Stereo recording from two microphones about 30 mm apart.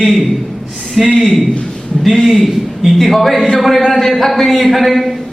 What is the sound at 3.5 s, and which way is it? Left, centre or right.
Speech, centre.